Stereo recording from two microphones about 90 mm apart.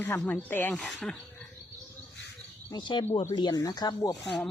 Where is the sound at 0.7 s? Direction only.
5° left (ahead or behind).